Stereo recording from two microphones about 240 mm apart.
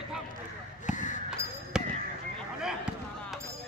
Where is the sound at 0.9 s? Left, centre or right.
Left.